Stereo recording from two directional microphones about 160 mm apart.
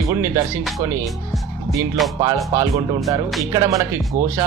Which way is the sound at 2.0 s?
Centre (ahead or behind).